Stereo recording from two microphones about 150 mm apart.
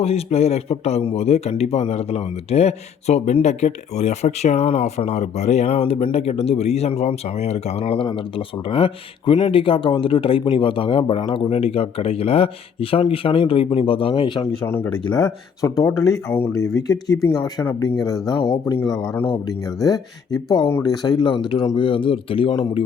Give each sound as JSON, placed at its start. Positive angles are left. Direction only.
{"t": 0.0, "sound": "a man's voice", "side_deg": 40}
{"t": 14.6, "sound": "speech", "side_deg": 15}
{"t": 15.0, "sound": "speech", "side_deg": 25}